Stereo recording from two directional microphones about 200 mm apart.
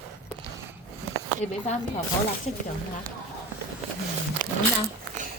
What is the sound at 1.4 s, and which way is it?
Speech, 35° left (ahead or behind).